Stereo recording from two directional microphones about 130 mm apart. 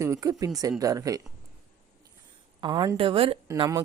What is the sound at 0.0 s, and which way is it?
Speech, 25° right (ahead or behind).